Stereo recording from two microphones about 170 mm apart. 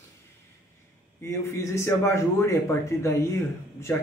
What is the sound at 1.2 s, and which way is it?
Speech, 15° left (ahead or behind).